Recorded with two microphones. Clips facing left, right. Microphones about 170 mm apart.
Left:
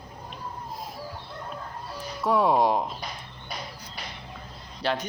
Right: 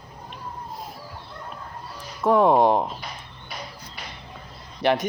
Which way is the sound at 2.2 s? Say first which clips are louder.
Right 5 dB; 50° right (ahead or behind).